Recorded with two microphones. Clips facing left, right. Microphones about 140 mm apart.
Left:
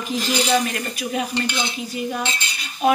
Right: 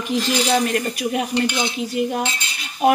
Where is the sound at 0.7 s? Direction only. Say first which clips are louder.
Right 5 dB; 55° right (ahead or behind).